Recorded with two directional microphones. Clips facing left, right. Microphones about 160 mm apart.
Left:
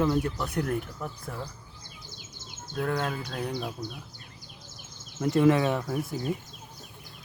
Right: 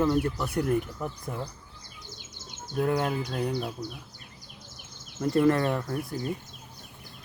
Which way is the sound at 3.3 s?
Centre (ahead or behind).